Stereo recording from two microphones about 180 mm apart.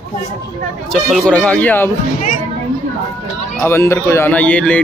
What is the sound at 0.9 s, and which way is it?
A man's voice, 5° left (ahead or behind).